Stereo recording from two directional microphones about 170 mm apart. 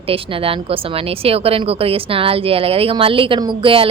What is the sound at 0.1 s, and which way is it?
Speech, 35° right (ahead or behind).